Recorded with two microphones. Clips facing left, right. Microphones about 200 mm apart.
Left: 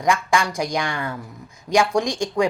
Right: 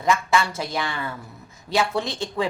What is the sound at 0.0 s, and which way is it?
A woman's voice, 15° left (ahead or behind).